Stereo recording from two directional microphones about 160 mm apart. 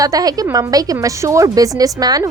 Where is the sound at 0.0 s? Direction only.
20° right (ahead or behind).